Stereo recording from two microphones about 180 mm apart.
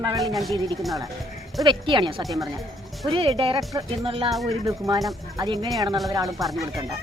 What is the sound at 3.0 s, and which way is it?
Speech, 30° right (ahead or behind).